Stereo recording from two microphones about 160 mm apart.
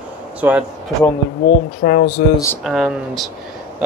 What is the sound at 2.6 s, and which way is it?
Speech, centre (ahead or behind).